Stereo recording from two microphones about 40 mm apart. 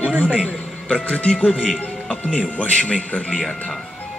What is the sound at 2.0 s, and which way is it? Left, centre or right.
Music, left.